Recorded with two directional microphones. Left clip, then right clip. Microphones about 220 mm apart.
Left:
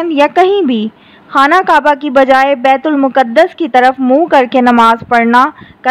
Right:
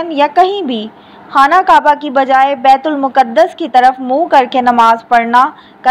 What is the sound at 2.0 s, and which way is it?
A woman's voice, 50° left (ahead or behind).